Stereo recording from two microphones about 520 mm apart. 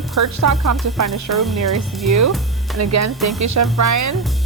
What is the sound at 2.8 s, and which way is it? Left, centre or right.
Speech, right.